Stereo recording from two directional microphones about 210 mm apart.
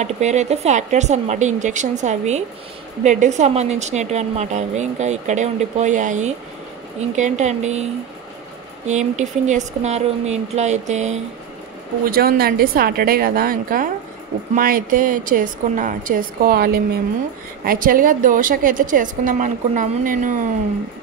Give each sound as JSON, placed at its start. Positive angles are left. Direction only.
{"t": 0.0, "sound": "a woman's voice", "side_deg": -35}
{"t": 8.8, "sound": "a woman's voice", "side_deg": -35}
{"t": 12.1, "sound": "a woman's voice", "side_deg": -45}